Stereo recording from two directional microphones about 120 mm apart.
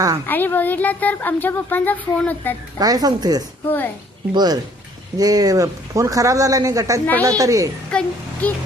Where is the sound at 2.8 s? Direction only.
35° right (ahead or behind).